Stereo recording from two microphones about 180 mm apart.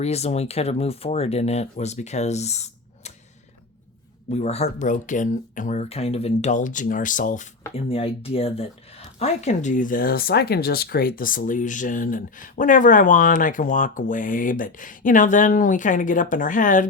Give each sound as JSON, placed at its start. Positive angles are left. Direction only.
{"t": 0.0, "sound": "speech", "side_deg": 35}
{"t": 4.3, "sound": "speech", "side_deg": 35}
{"t": 7.9, "sound": "speech", "side_deg": 30}